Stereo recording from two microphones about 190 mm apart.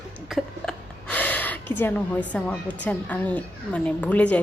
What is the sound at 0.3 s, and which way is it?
A woman's voice, centre (ahead or behind).